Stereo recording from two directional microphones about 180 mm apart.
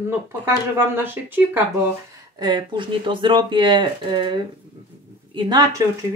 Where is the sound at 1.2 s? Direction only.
10° right (ahead or behind).